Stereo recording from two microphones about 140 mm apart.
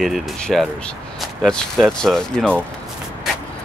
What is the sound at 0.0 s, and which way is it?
Speech, centre (ahead or behind).